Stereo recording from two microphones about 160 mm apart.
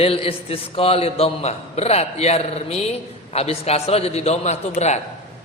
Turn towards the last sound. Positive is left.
turn(degrees=45)  # may be behind; listen again after turning